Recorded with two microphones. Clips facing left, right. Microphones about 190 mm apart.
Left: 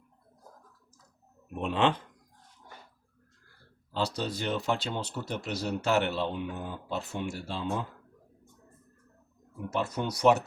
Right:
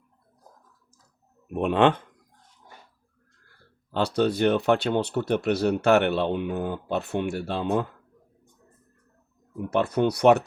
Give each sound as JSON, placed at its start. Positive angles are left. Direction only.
{"t": 1.5, "sound": "speech", "side_deg": -55}
{"t": 3.9, "sound": "speech", "side_deg": -60}
{"t": 9.6, "sound": "speech", "side_deg": -60}